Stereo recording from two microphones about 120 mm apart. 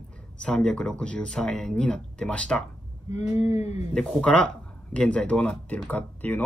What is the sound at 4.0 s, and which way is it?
Speech, 5° left (ahead or behind).